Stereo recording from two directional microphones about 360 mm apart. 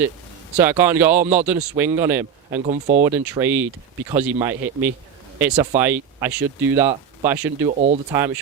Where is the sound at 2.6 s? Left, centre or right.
Centre.